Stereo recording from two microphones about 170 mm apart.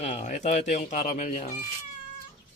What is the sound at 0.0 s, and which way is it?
Speech, 45° left (ahead or behind).